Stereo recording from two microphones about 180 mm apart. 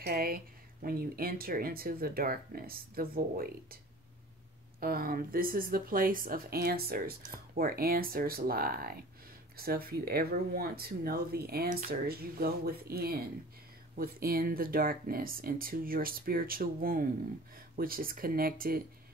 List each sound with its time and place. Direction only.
0.0 s speech: 55° right (ahead or behind)